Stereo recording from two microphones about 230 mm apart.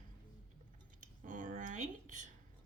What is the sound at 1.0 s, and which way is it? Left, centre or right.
Speech, right.